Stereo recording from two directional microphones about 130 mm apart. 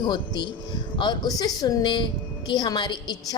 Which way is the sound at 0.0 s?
35° left (ahead or behind).